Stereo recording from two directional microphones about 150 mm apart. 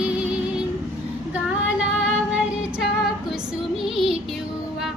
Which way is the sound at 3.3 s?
Centre (ahead or behind).